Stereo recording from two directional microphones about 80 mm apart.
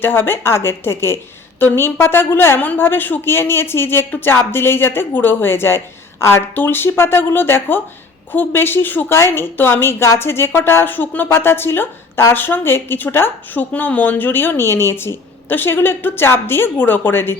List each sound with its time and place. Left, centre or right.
0.0 s a woman's voice: left